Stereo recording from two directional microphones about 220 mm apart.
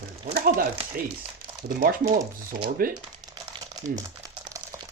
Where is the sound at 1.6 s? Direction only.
40° right (ahead or behind).